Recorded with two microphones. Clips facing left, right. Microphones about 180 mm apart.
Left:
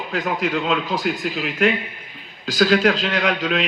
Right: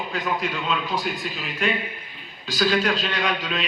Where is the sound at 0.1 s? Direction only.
80° left.